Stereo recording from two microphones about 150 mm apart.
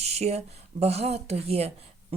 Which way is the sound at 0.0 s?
45° right (ahead or behind).